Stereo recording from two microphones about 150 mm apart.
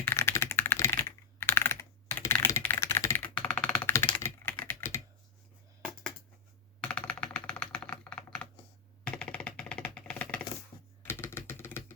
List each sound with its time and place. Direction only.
0.0 s typing: 15° left (ahead or behind)
3.3 s music: 5° left (ahead or behind)
4.2 s typing: 15° left (ahead or behind)
5.8 s cutlery: 5° left (ahead or behind)
6.8 s typing: 5° left (ahead or behind)
9.0 s music: 5° left (ahead or behind)
11.0 s typing: 15° left (ahead or behind)